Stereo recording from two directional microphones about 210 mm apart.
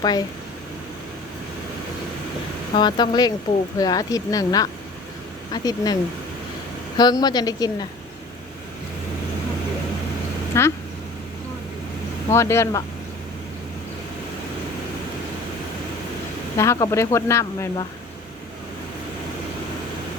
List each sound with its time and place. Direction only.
0.0 s a woman's voice: 20° left (ahead or behind)
2.7 s a woman's voice: 20° left (ahead or behind)
10.5 s speech: 15° left (ahead or behind)
12.3 s speech: 15° left (ahead or behind)
16.6 s speech: 15° left (ahead or behind)